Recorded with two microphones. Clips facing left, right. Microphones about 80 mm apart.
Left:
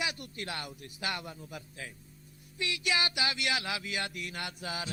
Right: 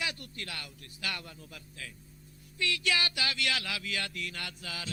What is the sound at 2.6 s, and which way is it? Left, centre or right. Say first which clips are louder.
Speech: right 1 dB; centre.